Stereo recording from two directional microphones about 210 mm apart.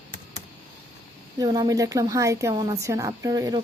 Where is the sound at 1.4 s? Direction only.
20° right (ahead or behind).